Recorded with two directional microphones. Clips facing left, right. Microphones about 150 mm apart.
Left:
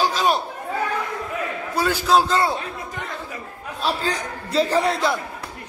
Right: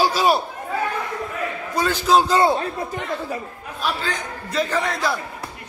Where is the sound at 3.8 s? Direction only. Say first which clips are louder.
Left 2 dB; 35° left (ahead or behind).